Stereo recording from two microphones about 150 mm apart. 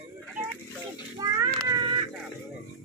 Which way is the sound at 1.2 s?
25° right (ahead or behind).